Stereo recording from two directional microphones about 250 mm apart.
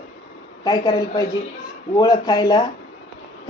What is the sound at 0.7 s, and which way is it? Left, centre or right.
A woman's voice, centre.